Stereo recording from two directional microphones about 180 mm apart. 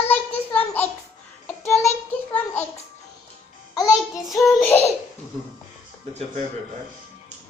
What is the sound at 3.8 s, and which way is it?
Music, 20° left (ahead or behind).